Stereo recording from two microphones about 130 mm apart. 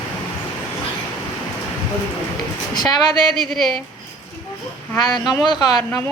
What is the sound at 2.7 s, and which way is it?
Speech, 30° left (ahead or behind).